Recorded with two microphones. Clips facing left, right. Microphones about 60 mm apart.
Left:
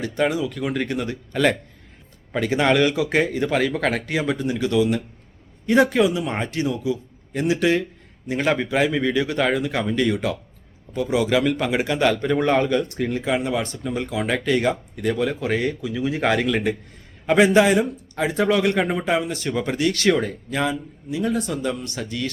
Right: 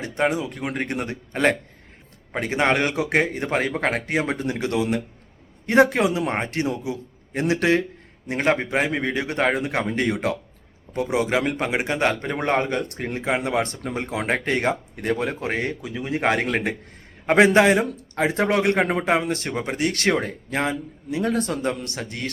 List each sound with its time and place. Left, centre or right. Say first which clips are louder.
0.0 s a man's voice: left 1 dB; right
8.3 s a man's voice: even; right